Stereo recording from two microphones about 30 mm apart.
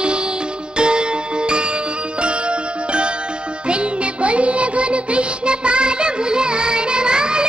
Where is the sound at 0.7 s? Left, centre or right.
Right.